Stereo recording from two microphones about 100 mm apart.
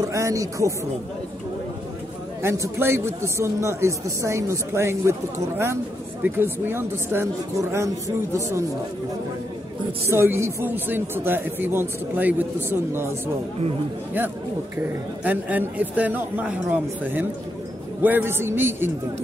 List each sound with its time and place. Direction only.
0.0 s speech: 35° right (ahead or behind)
2.4 s speech: 30° right (ahead or behind)
10.0 s speech: 25° right (ahead or behind)
14.8 s speech: 15° right (ahead or behind)